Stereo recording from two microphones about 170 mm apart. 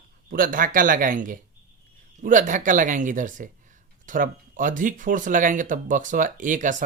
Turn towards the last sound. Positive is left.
turn(degrees=-50)  # may be behind; listen again after turning